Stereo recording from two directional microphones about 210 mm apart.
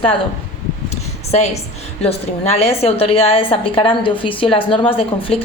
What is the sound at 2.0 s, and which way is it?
A woman's voice, 30° left (ahead or behind).